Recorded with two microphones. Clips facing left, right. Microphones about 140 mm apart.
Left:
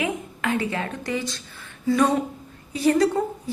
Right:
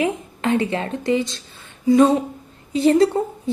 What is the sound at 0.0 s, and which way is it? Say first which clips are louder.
A woman's voice: right 5 dB; 30° right (ahead or behind).